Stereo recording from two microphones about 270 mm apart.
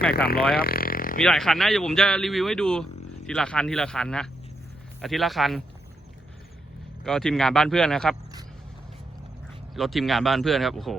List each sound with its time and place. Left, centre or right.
0.1 s speech: left
0.5 s vehicle: left
1.2 s speech: centre
7.0 s speech: centre
9.7 s speech: centre